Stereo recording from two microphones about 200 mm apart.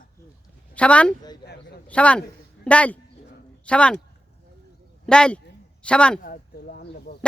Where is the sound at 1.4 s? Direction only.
55° left (ahead or behind).